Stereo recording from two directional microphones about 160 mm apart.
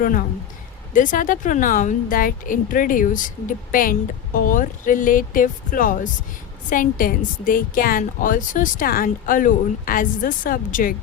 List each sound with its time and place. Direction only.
0.9 s a woman's voice: 55° left (ahead or behind)